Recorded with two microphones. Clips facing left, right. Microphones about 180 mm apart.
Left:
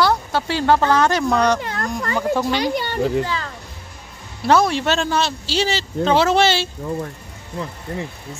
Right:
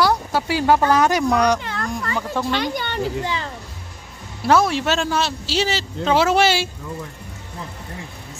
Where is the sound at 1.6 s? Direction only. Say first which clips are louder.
Left 2 dB; 40° left (ahead or behind).